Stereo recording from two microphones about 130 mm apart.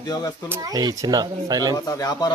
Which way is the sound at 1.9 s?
30° left (ahead or behind).